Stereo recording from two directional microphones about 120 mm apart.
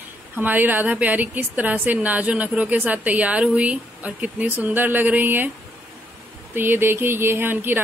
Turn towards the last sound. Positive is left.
turn(degrees=-15)  # may be behind; listen again after turning